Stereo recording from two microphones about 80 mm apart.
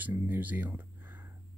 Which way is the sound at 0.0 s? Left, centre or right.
Right.